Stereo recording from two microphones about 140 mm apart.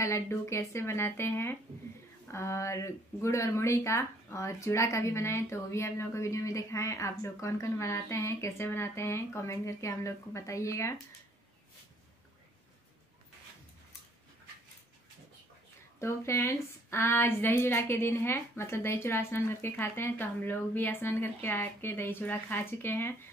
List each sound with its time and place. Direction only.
0.0 s speech: 20° left (ahead or behind)
16.0 s a woman's voice: 20° left (ahead or behind)